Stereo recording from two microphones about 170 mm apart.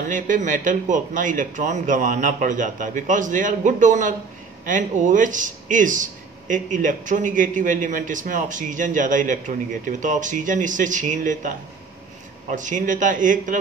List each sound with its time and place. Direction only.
0.1 s speech: 50° right (ahead or behind)